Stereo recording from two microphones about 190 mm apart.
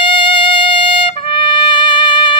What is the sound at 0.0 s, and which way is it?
Trumpet, 25° left (ahead or behind).